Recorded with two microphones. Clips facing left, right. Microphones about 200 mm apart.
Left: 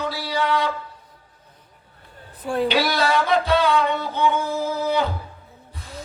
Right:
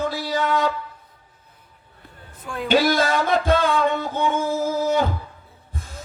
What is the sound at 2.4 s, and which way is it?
Speech, 35° left (ahead or behind).